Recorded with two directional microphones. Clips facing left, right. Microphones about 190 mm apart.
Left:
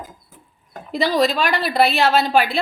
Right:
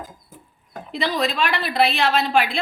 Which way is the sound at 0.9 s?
40° left (ahead or behind).